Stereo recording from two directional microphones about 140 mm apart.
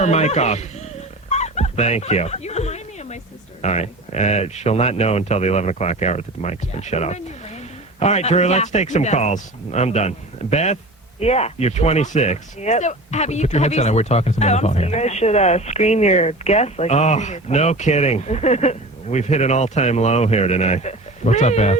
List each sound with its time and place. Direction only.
0.0 s speech: 50° left (ahead or behind)
1.3 s dog: 50° left (ahead or behind)
3.6 s speech: 50° left (ahead or behind)